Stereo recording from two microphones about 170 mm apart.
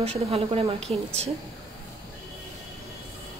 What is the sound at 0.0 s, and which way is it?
Speech, 35° right (ahead or behind).